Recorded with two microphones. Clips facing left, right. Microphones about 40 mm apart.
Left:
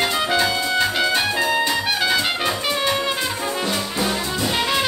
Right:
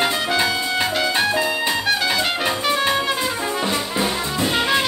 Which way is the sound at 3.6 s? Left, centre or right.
Centre.